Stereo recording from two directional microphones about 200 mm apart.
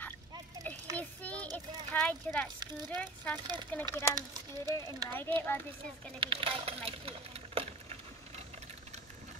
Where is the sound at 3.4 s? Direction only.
20° right (ahead or behind).